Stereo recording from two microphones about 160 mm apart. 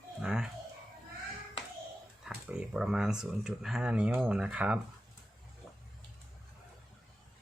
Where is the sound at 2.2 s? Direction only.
5° right (ahead or behind).